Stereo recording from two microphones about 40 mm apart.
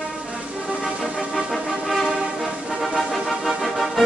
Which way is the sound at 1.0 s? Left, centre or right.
Centre.